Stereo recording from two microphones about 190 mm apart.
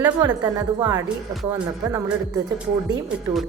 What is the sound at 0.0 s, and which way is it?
A woman's voice, 20° right (ahead or behind).